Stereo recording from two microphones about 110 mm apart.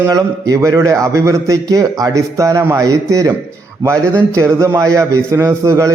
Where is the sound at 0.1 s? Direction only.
35° right (ahead or behind).